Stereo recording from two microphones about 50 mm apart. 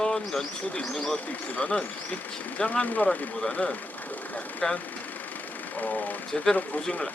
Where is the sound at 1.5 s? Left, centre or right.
Left.